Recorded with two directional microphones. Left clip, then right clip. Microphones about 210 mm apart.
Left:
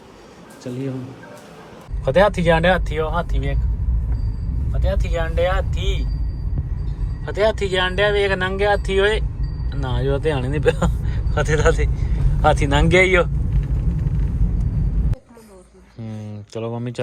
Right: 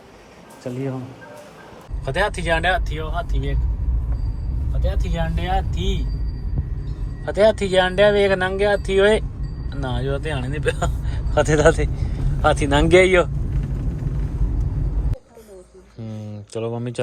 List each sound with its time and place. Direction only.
2.0 s speech: 10° right (ahead or behind)
4.8 s speech: 15° right (ahead or behind)
7.3 s speech: 20° right (ahead or behind)
16.0 s a sound: 15° right (ahead or behind)